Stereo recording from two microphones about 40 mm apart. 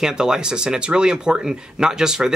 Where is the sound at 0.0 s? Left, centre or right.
Centre.